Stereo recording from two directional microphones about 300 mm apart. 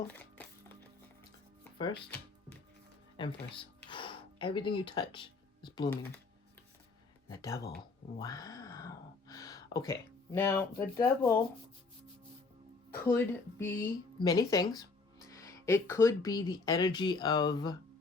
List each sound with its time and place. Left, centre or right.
0.1 s music: centre
3.2 s speech: centre
7.3 s speech: centre
12.9 s speech: centre